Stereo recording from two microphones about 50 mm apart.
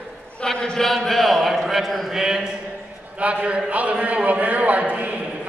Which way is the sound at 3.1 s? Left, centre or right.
Right.